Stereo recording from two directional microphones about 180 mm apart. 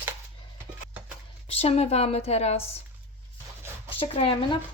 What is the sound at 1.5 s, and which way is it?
Speech, 35° left (ahead or behind).